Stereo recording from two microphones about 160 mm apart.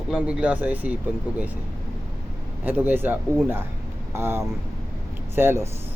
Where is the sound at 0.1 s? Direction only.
5° right (ahead or behind).